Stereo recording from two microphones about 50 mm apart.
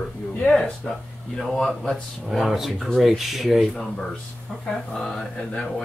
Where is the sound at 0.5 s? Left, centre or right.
Centre.